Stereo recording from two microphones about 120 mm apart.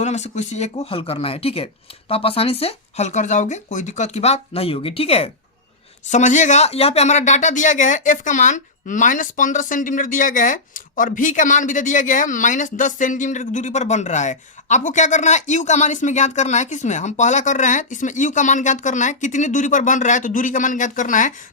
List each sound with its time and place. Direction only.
0.0 s speech: 70° left (ahead or behind)
6.1 s speech: 90° left